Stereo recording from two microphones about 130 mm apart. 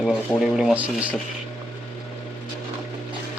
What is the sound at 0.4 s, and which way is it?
Speech, 5° right (ahead or behind).